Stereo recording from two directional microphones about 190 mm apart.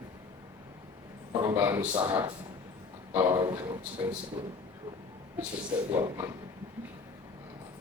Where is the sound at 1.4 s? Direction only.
15° right (ahead or behind).